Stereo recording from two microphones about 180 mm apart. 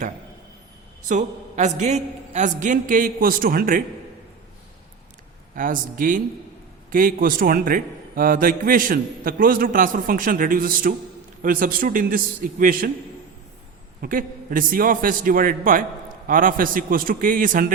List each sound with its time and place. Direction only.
1.0 s a man's voice: 40° right (ahead or behind)
5.5 s a man's voice: 50° right (ahead or behind)
14.0 s a man's voice: 50° right (ahead or behind)